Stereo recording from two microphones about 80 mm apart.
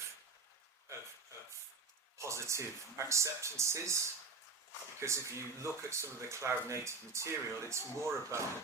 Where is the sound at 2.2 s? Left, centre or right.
Right.